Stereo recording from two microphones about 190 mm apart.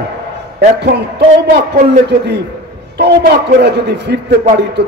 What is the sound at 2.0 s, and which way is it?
A man's voice, 60° right (ahead or behind).